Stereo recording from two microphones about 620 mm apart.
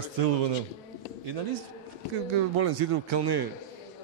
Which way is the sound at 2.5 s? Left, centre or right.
Right.